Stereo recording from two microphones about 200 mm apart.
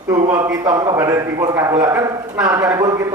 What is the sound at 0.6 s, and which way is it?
A man's voice, 15° right (ahead or behind).